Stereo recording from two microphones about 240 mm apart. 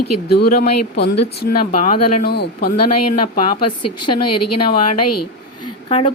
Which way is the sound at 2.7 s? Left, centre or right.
Left.